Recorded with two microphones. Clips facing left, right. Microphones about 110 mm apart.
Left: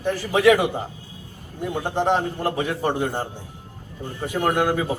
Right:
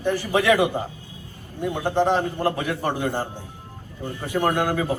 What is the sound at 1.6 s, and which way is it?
A man's voice, 15° left (ahead or behind).